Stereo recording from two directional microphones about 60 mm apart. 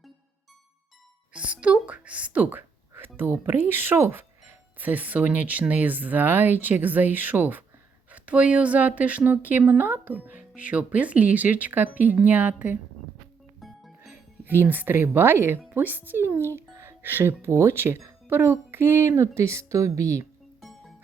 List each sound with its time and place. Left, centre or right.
1.3 s a woman's voice: right
3.4 s a woman's voice: right
13.6 s music: centre
14.1 s speech: right
20.6 s music: centre